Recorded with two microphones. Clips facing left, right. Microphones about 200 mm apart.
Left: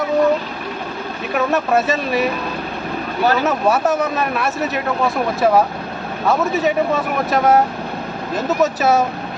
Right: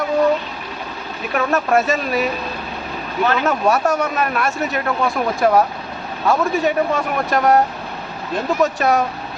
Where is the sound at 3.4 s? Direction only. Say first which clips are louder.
Left 1 dB; centre (ahead or behind).